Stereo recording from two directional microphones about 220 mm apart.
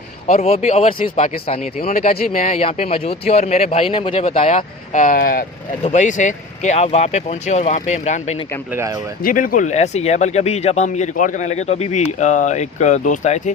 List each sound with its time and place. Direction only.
0.3 s speech: 30° left (ahead or behind)
8.7 s speech: 15° right (ahead or behind)
9.2 s speech: 40° left (ahead or behind)